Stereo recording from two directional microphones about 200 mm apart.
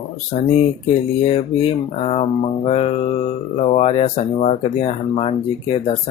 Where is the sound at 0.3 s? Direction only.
30° left (ahead or behind).